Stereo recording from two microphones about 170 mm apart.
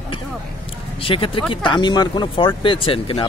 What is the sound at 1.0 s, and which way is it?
Speech, 30° left (ahead or behind).